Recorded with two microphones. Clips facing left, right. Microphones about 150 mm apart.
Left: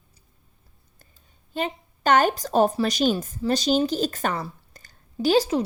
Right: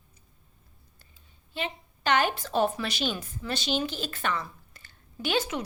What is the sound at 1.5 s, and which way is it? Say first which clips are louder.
A woman's voice: left 6 dB; 45° left (ahead or behind).